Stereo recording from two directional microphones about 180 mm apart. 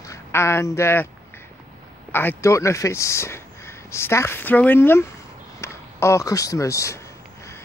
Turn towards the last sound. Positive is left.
turn(degrees=15)  # may be behind; listen again after turning